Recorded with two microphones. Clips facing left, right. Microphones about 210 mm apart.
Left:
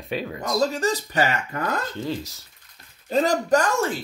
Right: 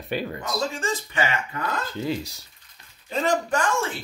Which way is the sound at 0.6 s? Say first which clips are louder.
Left 6 dB; 40° left (ahead or behind).